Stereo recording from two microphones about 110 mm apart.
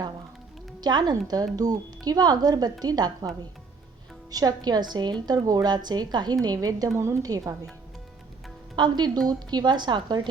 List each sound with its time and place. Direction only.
0.8 s a woman's voice: 40° right (ahead or behind)
8.7 s a woman's voice: 40° right (ahead or behind)